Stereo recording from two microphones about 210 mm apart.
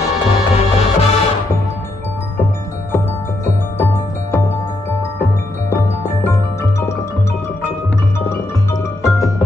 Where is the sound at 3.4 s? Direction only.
10° left (ahead or behind).